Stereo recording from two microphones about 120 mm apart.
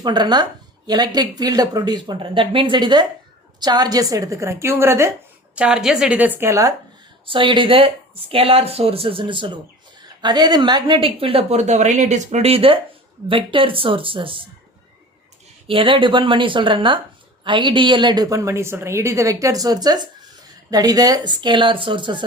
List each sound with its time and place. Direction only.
0.0 s a woman's voice: 35° right (ahead or behind); by 5.1 s 20° right (ahead or behind)
5.5 s a woman's voice: 5° right (ahead or behind); by 6.7 s 25° right (ahead or behind)
7.3 s a woman's voice: 45° right (ahead or behind)
15.6 s a woman's voice: 45° right (ahead or behind)